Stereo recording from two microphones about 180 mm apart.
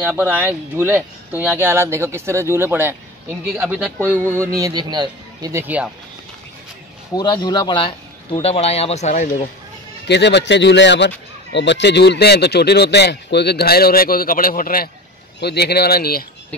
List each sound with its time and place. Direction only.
0.0 s speech: 10° right (ahead or behind)
7.2 s a man's voice: 20° left (ahead or behind); by 9.3 s 40° left (ahead or behind)
10.0 s speech: 70° left (ahead or behind); by 14.9 s 55° left (ahead or behind)
15.4 s speech: 65° left (ahead or behind)